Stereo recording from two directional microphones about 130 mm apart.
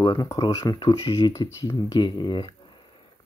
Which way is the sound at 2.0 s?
35° left (ahead or behind).